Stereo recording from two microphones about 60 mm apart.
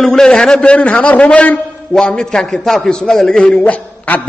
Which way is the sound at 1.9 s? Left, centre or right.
Centre.